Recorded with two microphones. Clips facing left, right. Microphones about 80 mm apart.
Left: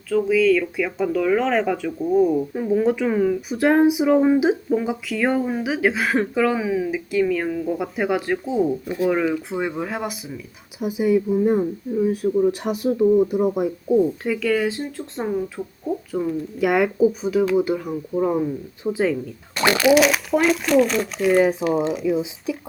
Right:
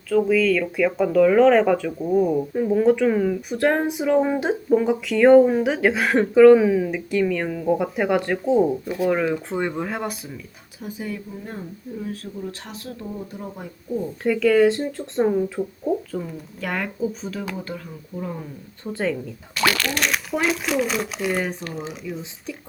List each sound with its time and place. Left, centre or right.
0.1 s speech: centre
10.8 s speech: centre
14.3 s speech: centre
19.5 s speech: left
19.8 s speech: centre